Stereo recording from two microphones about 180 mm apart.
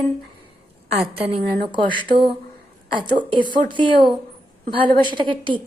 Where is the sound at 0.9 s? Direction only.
35° right (ahead or behind).